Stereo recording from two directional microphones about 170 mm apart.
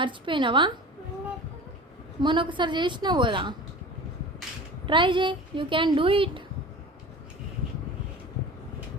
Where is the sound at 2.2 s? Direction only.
30° right (ahead or behind).